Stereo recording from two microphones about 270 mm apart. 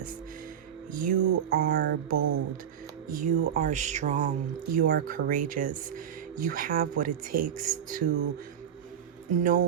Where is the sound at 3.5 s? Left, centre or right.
Right.